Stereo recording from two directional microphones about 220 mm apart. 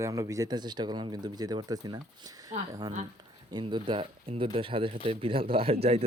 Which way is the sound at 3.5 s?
20° right (ahead or behind).